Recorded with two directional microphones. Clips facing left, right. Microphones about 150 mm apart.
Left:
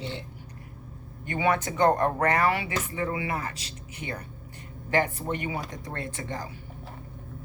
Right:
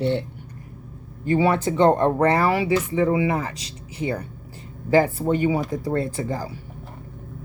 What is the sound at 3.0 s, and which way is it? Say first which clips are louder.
Speech: right 7 dB; 20° right (ahead or behind).